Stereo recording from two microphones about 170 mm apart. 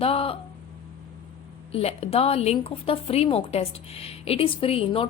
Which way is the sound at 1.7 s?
35° left (ahead or behind).